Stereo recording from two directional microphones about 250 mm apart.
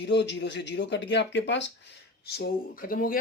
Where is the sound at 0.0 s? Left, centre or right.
Left.